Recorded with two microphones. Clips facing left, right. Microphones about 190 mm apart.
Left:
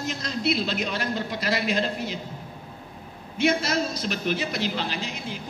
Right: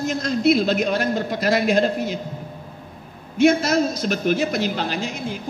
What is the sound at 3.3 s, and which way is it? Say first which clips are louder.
A man's voice: right 7 dB; 45° right (ahead or behind).